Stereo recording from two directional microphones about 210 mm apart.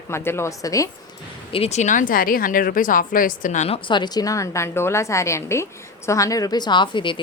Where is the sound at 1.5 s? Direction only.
30° left (ahead or behind).